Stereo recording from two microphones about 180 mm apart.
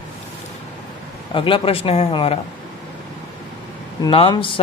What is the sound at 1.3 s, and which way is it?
Speech, 30° left (ahead or behind).